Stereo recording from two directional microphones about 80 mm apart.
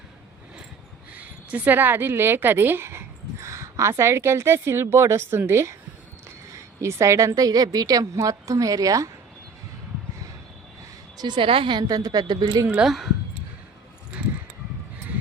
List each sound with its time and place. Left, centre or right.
1.1 s a woman's voice: centre; by 9.0 s right
11.2 s a woman's voice: right
12.8 s speech: centre